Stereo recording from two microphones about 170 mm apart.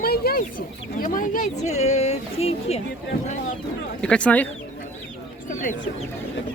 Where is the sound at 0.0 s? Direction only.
65° left (ahead or behind).